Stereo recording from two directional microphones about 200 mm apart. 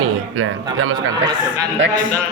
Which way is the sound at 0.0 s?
90° right.